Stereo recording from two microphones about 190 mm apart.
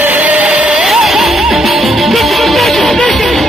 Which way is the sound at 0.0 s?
10° right (ahead or behind).